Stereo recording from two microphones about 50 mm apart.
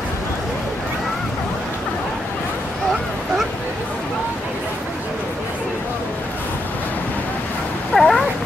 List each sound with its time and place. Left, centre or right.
7.9 s cat: centre